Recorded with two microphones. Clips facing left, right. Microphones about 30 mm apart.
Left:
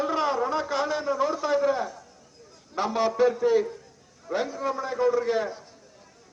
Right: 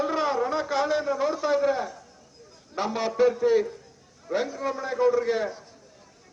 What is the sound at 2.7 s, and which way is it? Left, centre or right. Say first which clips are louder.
A man's voice: left 2 dB; centre.